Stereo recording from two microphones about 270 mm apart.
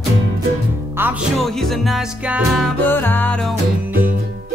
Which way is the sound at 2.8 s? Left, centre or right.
Centre.